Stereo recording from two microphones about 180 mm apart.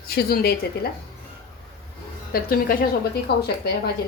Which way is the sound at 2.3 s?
55° left (ahead or behind).